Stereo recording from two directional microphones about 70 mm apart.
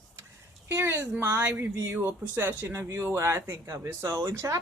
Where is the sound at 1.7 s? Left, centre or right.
Right.